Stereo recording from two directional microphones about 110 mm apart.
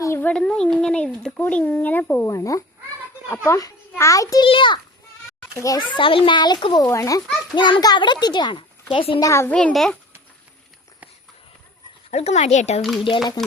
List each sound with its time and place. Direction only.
0.0 s speech: 20° left (ahead or behind)
2.3 s a child's voice: 30° left (ahead or behind)
4.4 s a child's voice: 50° left (ahead or behind)
5.5 s a child's voice: 30° left (ahead or behind)
6.0 s a child's voice: 50° left (ahead or behind)
6.8 s a child's voice: 30° left (ahead or behind)
7.5 s a child's voice: 45° left (ahead or behind)
8.9 s a woman's voice: 55° left (ahead or behind)
9.2 s a child's voice: 25° left (ahead or behind)
9.5 s speech: 15° left (ahead or behind)
12.1 s speech: 90° left